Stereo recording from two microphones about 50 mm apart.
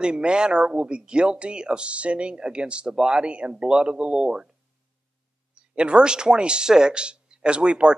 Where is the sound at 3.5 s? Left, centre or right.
Centre.